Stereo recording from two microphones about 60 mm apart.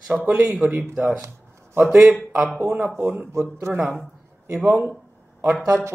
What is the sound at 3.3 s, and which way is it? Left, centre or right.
Speech, right.